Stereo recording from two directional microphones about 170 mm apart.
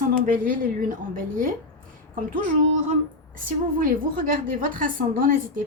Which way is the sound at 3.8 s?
55° right (ahead or behind).